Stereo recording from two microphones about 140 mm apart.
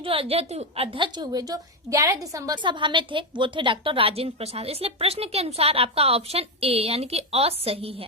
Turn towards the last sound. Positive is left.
turn(degrees=-45)  # may be behind; listen again after turning